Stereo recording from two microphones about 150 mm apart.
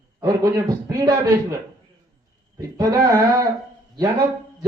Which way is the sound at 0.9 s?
20° right (ahead or behind).